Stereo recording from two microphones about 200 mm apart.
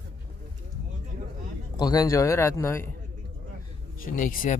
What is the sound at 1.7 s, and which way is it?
A man's voice, 20° left (ahead or behind).